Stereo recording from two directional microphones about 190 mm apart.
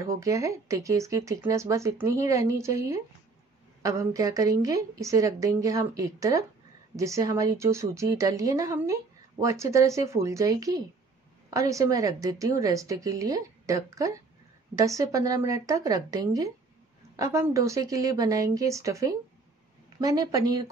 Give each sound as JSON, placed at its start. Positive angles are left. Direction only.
{"t": 0.0, "sound": "a woman's voice", "side_deg": -15}